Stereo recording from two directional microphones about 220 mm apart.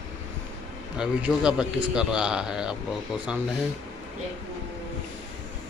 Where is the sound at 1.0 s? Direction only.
5° right (ahead or behind).